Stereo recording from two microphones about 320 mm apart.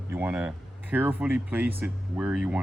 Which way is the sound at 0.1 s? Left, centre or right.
Centre.